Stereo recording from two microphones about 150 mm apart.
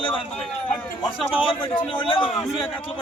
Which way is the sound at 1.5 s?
35° left (ahead or behind).